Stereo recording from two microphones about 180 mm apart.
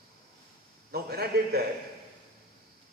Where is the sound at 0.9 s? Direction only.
60° right (ahead or behind).